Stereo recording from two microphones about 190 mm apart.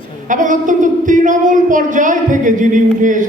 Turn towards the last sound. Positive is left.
turn(degrees=-45)  # may be behind; listen again after turning